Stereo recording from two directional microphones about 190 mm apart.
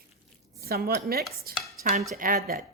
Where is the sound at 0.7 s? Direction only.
50° right (ahead or behind).